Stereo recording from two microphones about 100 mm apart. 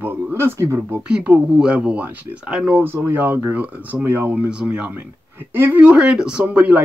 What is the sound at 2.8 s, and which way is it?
Speech, 25° right (ahead or behind).